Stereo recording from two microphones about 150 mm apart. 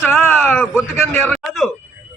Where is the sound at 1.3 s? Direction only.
Centre (ahead or behind).